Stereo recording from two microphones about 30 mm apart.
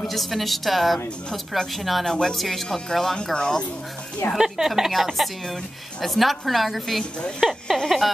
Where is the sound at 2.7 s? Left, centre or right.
Centre.